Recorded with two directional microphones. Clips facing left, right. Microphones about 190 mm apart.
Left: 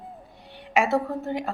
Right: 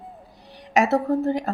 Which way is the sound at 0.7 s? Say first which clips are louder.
Right 4 dB; 40° right (ahead or behind).